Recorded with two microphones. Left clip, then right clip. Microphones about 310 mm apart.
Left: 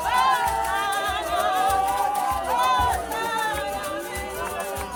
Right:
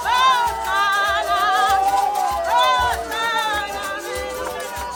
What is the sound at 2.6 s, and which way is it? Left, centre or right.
Run, right.